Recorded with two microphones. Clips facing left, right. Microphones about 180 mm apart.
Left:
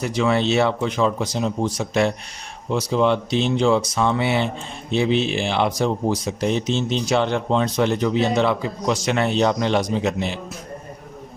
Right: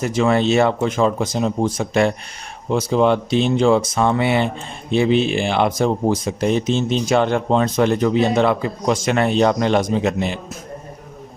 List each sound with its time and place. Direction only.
0.0 s speech: 50° right (ahead or behind)